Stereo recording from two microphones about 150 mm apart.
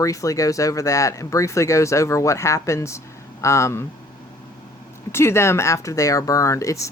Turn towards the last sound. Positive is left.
turn(degrees=20)  # may be behind; listen again after turning